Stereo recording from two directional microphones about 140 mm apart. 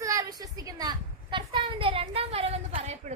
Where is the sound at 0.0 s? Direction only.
25° right (ahead or behind).